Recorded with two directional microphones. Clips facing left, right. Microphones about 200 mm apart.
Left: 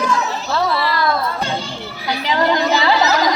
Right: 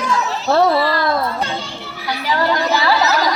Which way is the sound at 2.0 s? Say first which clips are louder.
Left 1 dB; 20° left (ahead or behind).